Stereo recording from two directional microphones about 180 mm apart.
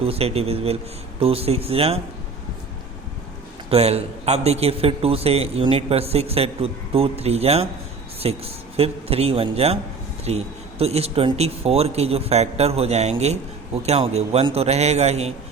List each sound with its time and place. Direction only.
0.0 s a man's voice: 35° right (ahead or behind)
3.7 s a man's voice: 35° right (ahead or behind)